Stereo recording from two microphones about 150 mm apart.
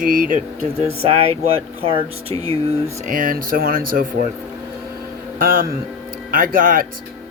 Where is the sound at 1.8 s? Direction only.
40° right (ahead or behind).